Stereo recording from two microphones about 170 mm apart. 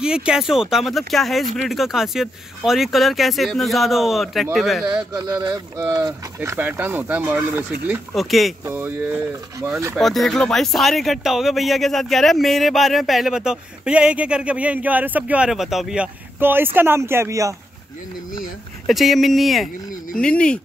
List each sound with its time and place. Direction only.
0.0 s speech: 5° right (ahead or behind)
5.1 s speech: 25° right (ahead or behind); by 8.5 s centre (ahead or behind)
8.6 s speech: 15° right (ahead or behind)
9.9 s speech: centre (ahead or behind); by 17.6 s 20° right (ahead or behind)
18.9 s speech: centre (ahead or behind)